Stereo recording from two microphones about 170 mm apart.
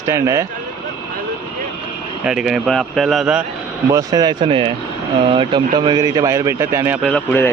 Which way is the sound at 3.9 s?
20° right (ahead or behind).